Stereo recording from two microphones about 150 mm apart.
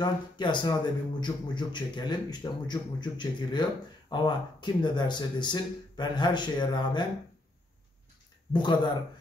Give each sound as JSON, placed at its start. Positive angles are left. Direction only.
{"t": 0.0, "sound": "speech", "side_deg": 30}
{"t": 8.5, "sound": "speech", "side_deg": 30}